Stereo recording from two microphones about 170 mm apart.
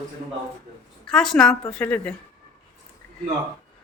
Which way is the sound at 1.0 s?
5° left (ahead or behind).